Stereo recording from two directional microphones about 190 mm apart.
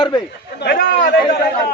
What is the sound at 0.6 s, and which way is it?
Speech, 55° left (ahead or behind).